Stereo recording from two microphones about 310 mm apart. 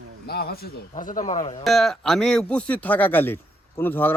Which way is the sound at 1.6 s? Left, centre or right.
Centre.